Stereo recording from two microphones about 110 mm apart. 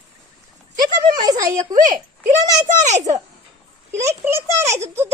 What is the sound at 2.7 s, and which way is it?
Speech, 90° right.